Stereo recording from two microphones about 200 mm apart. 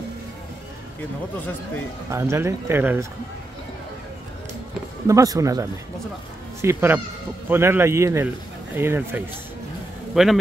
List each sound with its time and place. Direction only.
2.0 s speech: 15° right (ahead or behind)
5.0 s speech: 15° right (ahead or behind)